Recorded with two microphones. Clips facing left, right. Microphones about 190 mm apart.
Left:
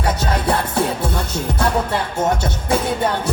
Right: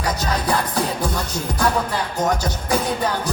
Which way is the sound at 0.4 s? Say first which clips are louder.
Left 3 dB; 25° left (ahead or behind).